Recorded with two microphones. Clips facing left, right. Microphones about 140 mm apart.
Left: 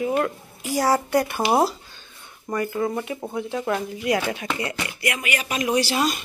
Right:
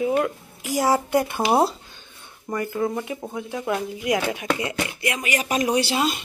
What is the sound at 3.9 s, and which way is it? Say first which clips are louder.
Speech: even; 20° right (ahead or behind).